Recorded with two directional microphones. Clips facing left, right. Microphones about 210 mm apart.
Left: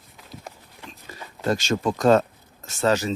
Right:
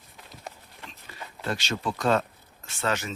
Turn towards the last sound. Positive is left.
turn(degrees=35)  # may be behind; listen again after turning